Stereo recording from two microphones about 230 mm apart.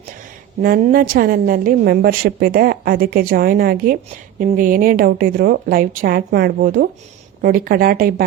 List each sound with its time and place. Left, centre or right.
0.6 s a woman's voice: right